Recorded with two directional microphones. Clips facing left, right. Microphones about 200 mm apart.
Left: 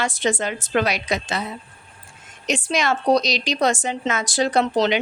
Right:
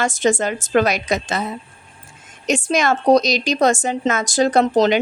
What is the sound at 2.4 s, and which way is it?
Speech, 45° right (ahead or behind).